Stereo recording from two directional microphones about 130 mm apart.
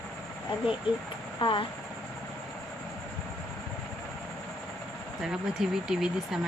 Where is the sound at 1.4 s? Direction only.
40° left (ahead or behind).